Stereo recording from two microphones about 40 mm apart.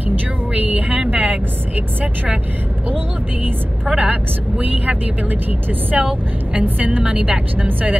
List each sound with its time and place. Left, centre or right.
0.6 s vehicle: right
3.9 s speech: right
5.9 s speech: right
7.5 s speech: right